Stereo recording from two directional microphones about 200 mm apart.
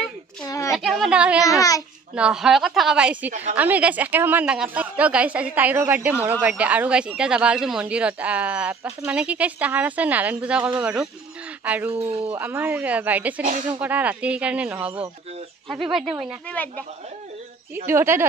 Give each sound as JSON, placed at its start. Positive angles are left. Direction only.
{"t": 0.5, "sound": "a sound", "side_deg": 15}
{"t": 0.7, "sound": "a woman's voice", "side_deg": 0}
{"t": 1.4, "sound": "a child's voice", "side_deg": 15}
{"t": 2.1, "sound": "speech", "side_deg": -5}
{"t": 11.9, "sound": "speech", "side_deg": -30}
{"t": 12.3, "sound": "speech", "side_deg": -10}
{"t": 13.4, "sound": "speech", "side_deg": -40}
{"t": 13.7, "sound": "speech", "side_deg": -10}
{"t": 17.8, "sound": "speech", "side_deg": -10}